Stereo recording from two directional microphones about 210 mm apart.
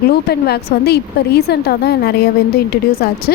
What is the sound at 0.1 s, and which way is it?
A woman's voice, 50° left (ahead or behind).